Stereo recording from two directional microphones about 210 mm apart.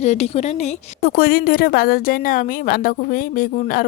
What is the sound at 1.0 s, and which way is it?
A woman's voice, 45° left (ahead or behind).